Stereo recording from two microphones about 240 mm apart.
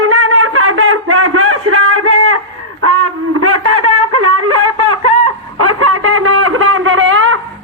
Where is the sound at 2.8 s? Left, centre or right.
Right.